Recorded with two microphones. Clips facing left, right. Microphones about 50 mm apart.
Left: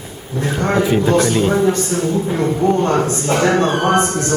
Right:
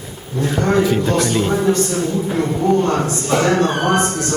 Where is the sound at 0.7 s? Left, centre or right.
Centre.